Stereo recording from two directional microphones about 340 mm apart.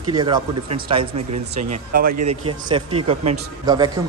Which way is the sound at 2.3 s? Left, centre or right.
Centre.